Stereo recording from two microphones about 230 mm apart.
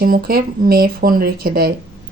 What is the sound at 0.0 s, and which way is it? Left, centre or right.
Speech, right.